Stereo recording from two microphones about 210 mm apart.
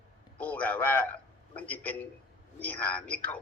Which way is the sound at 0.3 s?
5° left (ahead or behind).